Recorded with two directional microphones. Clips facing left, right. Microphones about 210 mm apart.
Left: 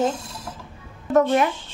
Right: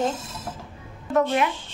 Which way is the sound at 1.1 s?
45° left (ahead or behind).